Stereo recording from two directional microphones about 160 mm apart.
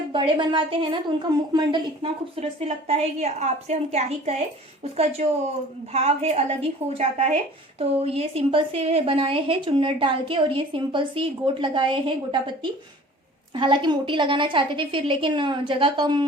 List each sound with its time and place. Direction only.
0.1 s a woman's voice: 30° right (ahead or behind)
2.6 s a woman's voice: 40° right (ahead or behind)
13.6 s a woman's voice: 30° right (ahead or behind)